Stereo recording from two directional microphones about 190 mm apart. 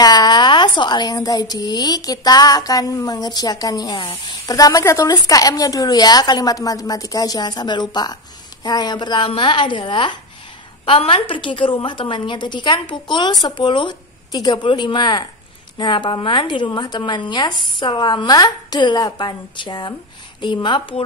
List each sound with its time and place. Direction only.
0.0 s speech: 20° left (ahead or behind)